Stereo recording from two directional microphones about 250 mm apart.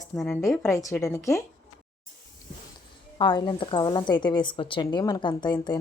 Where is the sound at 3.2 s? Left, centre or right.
Centre.